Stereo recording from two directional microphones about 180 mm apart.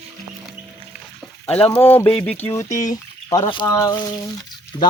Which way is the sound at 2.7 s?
20° left (ahead or behind).